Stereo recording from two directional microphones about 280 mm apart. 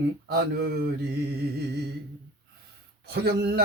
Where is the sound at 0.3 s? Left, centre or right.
Right.